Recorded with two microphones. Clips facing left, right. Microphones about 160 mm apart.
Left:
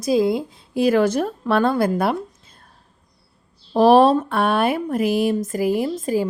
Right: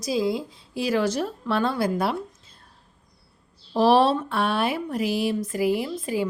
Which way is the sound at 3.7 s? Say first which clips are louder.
Left 5 dB; 50° left (ahead or behind).